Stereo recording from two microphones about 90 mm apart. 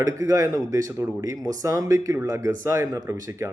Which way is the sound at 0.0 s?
40° right (ahead or behind).